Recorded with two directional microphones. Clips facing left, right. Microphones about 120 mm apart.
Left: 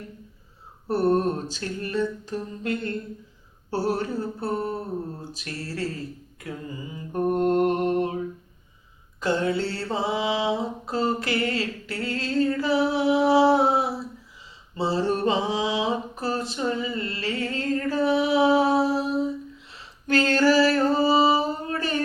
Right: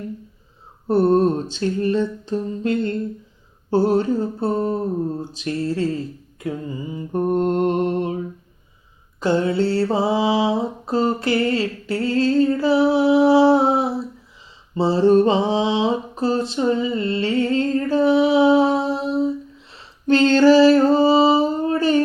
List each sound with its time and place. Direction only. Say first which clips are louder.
0.9 s mantra: right 6 dB; 25° right (ahead or behind)
9.2 s mantra: right 6 dB; 30° right (ahead or behind)
14.9 s a sound: right 9 dB; 30° right (ahead or behind)